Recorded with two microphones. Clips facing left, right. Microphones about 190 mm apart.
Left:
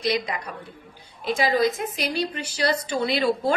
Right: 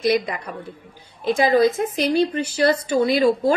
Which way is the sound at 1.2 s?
50° right (ahead or behind).